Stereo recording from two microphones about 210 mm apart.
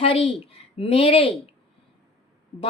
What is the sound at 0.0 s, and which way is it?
A woman's voice, 25° left (ahead or behind).